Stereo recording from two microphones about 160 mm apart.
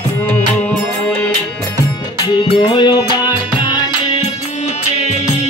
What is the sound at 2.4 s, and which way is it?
Music, 30° left (ahead or behind).